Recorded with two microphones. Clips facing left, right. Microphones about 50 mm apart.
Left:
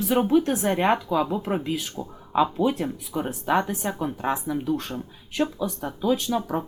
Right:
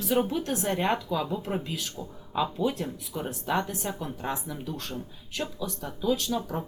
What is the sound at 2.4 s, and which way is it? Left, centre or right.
Speech, left.